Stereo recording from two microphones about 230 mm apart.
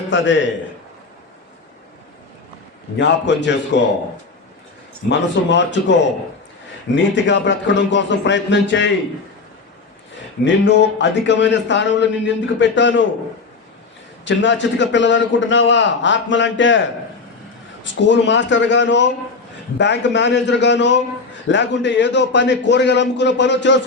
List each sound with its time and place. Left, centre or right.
0.1 s a man's voice: left
3.0 s a man's voice: left
5.0 s a man's voice: left
10.4 s a man's voice: left
14.3 s a man's voice: left
17.8 s a man's voice: left